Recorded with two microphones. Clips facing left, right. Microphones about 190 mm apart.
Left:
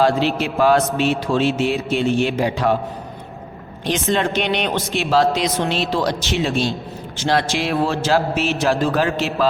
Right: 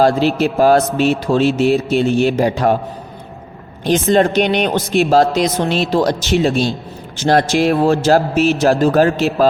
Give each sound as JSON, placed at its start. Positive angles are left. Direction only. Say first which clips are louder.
{"t": 0.0, "sound": "a man's voice", "louder": "right 4 dB", "side_deg": -40}
{"t": 4.1, "sound": "a man's voice", "louder": "right 6 dB", "side_deg": -40}